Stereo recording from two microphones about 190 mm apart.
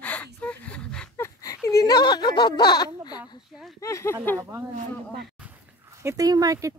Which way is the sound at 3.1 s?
20° left (ahead or behind).